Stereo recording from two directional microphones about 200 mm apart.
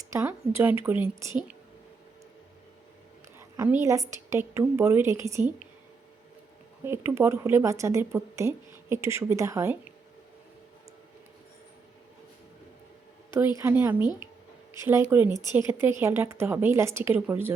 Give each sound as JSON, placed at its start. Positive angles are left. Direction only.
{"t": 0.1, "sound": "a woman's voice", "side_deg": -15}
{"t": 3.3, "sound": "a woman's voice", "side_deg": -10}
{"t": 6.8, "sound": "a woman's voice", "side_deg": -10}
{"t": 13.6, "sound": "a woman's voice", "side_deg": -10}